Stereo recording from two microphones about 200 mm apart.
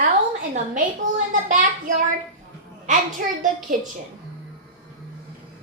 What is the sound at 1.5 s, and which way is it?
Child singing, 40° right (ahead or behind).